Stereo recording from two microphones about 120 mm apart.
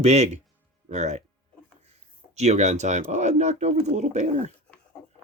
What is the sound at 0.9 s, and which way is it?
Speech, 75° right (ahead or behind).